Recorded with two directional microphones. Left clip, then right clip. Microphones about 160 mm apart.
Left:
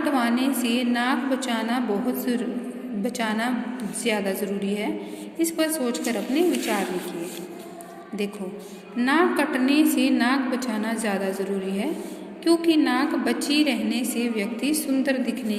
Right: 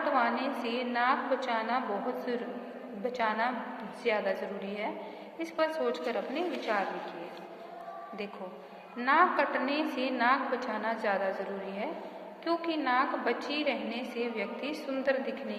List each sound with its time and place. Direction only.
0.0 s a woman's voice: 15° left (ahead or behind)
3.0 s a woman's voice: 15° left (ahead or behind)
9.0 s a woman's voice: 15° left (ahead or behind)
12.5 s a woman's voice: 15° left (ahead or behind)